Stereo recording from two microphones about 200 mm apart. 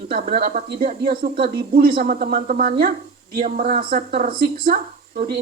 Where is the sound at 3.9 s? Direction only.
45° right (ahead or behind).